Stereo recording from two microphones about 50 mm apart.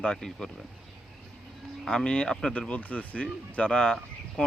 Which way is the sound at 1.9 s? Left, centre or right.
Centre.